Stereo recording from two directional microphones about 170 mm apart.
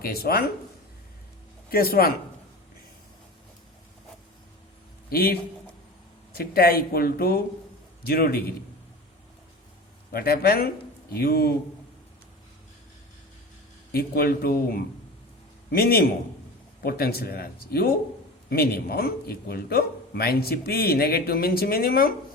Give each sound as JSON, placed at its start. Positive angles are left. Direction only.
{"t": 0.0, "sound": "a man's voice", "side_deg": 65}
{"t": 1.7, "sound": "a man's voice", "side_deg": 60}
{"t": 5.0, "sound": "a man's voice", "side_deg": 65}
{"t": 10.1, "sound": "a man's voice", "side_deg": 60}
{"t": 13.9, "sound": "a man's voice", "side_deg": 60}